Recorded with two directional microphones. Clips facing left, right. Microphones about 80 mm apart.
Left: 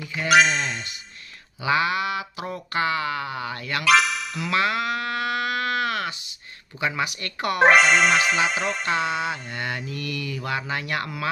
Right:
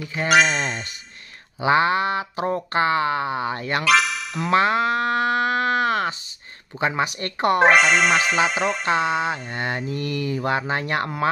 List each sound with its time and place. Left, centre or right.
0.0 s speech: right
0.3 s speech: centre
1.6 s speech: right
3.8 s music: centre
4.4 s a sound: right
6.8 s speech: right
7.6 s speech: centre
8.8 s speech: right